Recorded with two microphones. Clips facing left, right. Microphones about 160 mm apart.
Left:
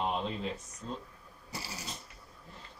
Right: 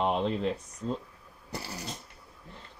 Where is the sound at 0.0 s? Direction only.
65° right (ahead or behind).